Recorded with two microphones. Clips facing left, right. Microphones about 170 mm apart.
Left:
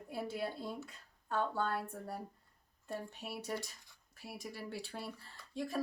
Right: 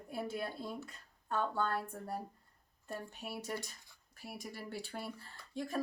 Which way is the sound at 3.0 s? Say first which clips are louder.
Even; centre (ahead or behind).